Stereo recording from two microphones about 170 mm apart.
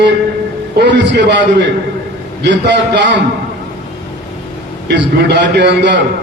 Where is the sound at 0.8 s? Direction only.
90° right.